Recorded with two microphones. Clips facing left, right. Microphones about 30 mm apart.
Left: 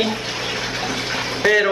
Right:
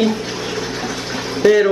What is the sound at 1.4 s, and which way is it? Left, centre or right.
Speech, left.